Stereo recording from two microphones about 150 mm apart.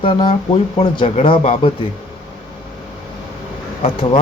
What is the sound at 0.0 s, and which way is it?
Speech, 35° left (ahead or behind).